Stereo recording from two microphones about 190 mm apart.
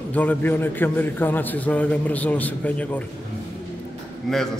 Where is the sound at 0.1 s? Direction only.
10° left (ahead or behind).